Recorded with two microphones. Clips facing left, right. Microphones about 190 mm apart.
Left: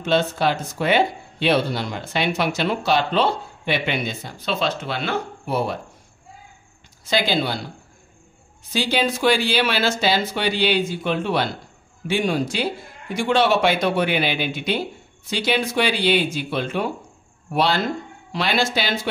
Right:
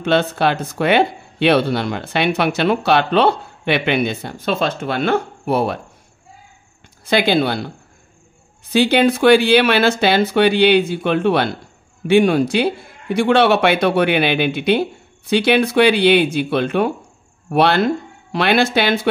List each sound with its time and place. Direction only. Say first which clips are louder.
0.0 s speech: right 3 dB; 65° right (ahead or behind)
7.1 s speech: right 6 dB; 60° right (ahead or behind)
8.7 s speech: right 8 dB; 60° right (ahead or behind)